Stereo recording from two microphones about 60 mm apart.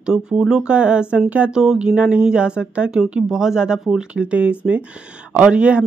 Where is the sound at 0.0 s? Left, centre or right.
Centre.